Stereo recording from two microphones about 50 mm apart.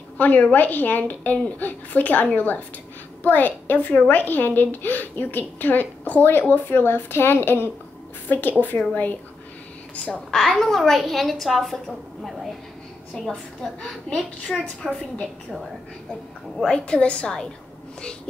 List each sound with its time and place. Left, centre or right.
0.2 s a woman's voice: left
8.3 s a woman's voice: left
10.3 s a woman's voice: centre
16.6 s a woman's voice: centre